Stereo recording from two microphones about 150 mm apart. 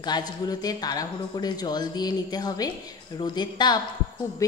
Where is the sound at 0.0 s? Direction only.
25° left (ahead or behind).